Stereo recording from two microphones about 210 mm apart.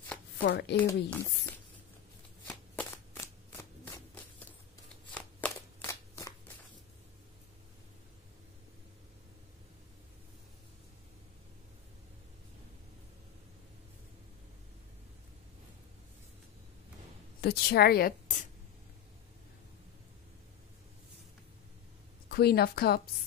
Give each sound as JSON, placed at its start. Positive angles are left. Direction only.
{"t": 0.4, "sound": "a woman's voice", "side_deg": 50}
{"t": 0.8, "sound": "speech", "side_deg": 10}
{"t": 2.4, "sound": "shuffling cards", "side_deg": 10}
{"t": 17.4, "sound": "a woman's voice", "side_deg": 50}
{"t": 22.3, "sound": "a woman's voice", "side_deg": 50}